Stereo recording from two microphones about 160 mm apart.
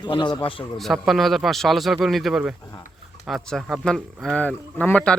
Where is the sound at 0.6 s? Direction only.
Centre (ahead or behind).